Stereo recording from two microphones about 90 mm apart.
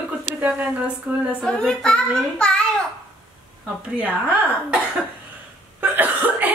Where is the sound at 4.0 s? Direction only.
15° right (ahead or behind).